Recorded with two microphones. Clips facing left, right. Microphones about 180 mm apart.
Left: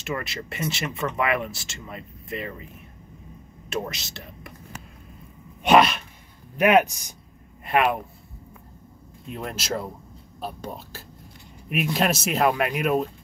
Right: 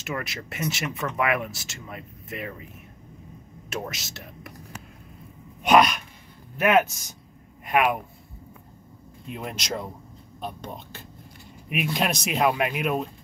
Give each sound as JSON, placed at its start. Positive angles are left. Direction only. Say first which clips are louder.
{"t": 0.0, "sound": "speech", "louder": "left 2 dB", "side_deg": 0}
{"t": 3.7, "sound": "speech", "louder": "left 3 dB", "side_deg": 0}
{"t": 5.7, "sound": "sneeze", "louder": "left 1 dB", "side_deg": 25}
{"t": 7.7, "sound": "speech", "louder": "left 1 dB", "side_deg": -5}
{"t": 9.3, "sound": "speech", "louder": "left 2 dB", "side_deg": 0}